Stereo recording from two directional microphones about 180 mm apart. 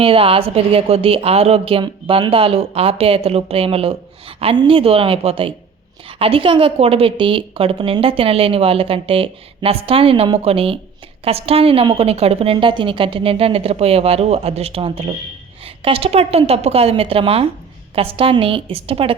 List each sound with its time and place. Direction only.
0.0 s a woman's voice: 30° right (ahead or behind)